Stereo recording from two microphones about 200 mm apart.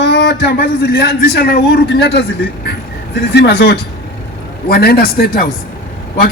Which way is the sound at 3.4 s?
60° left (ahead or behind).